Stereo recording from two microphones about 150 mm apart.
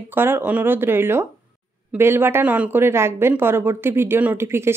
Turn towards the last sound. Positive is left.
turn(degrees=-15)  # may be behind; listen again after turning